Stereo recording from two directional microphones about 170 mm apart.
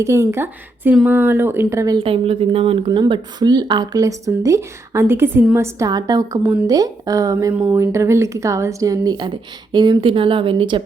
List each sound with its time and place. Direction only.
0.0 s speech: 15° right (ahead or behind)
2.0 s speech: 35° right (ahead or behind)